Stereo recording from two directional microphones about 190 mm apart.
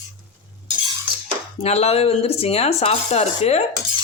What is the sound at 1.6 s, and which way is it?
Cutlery, 35° left (ahead or behind).